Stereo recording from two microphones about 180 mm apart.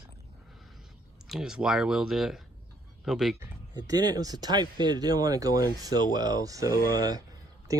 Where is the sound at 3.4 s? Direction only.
20° right (ahead or behind).